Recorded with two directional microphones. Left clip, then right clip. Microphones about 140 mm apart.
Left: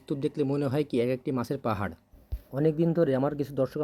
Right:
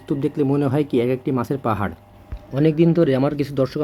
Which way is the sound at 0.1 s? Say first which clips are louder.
Right 8 dB; 35° left (ahead or behind).